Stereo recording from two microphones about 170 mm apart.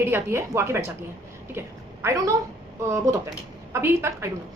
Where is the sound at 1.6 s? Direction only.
15° right (ahead or behind).